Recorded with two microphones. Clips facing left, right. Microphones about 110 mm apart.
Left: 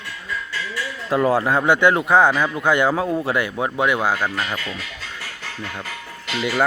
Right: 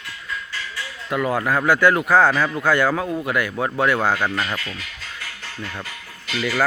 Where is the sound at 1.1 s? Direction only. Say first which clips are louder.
Left 3 dB; 30° left (ahead or behind); by 4.6 s 10° left (ahead or behind).